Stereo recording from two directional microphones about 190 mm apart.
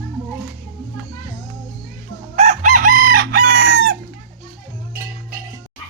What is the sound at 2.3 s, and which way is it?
Chicken, 35° right (ahead or behind).